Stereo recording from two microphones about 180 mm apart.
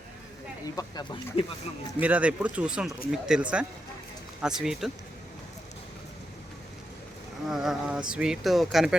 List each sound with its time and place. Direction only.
0.6 s speech: 20° left (ahead or behind)
2.0 s speech: 10° right (ahead or behind)
7.5 s speech: centre (ahead or behind)